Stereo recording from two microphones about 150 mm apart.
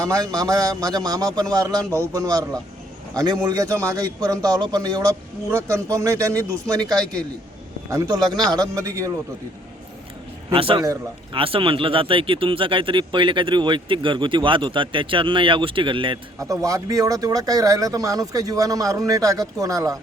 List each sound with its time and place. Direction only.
0.0 s speech: 25° right (ahead or behind)
10.5 s speech: 35° right (ahead or behind)
16.4 s speech: 20° right (ahead or behind)